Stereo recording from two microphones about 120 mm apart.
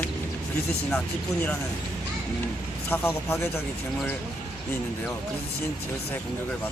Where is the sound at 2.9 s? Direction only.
20° left (ahead or behind).